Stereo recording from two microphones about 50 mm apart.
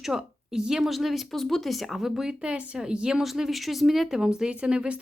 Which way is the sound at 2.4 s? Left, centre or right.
Right.